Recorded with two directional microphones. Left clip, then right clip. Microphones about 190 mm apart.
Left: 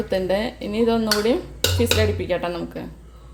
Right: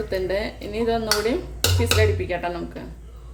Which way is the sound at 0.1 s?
30° left (ahead or behind).